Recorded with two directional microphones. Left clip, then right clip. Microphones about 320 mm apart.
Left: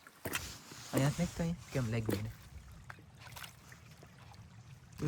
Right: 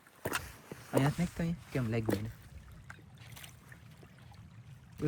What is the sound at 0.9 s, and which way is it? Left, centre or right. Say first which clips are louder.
Speech: right 3 dB; centre.